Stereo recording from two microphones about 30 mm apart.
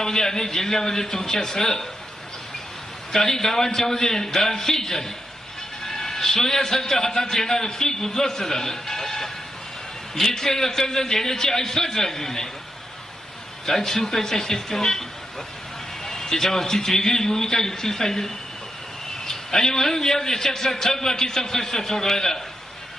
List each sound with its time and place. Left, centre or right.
0.0 s a man's voice: centre
3.1 s a man's voice: centre
13.7 s a man's voice: centre
16.0 s a man's voice: centre